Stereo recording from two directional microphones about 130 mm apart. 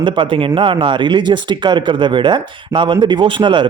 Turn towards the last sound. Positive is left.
turn(degrees=-40)  # may be behind; listen again after turning